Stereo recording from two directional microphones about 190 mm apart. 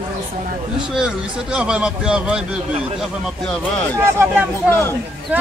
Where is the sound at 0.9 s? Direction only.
5° right (ahead or behind).